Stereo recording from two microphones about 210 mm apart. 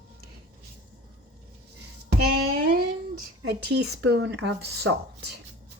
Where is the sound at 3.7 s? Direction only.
50° right (ahead or behind).